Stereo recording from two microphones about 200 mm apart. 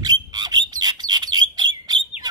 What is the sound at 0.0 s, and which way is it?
Bird, 20° right (ahead or behind).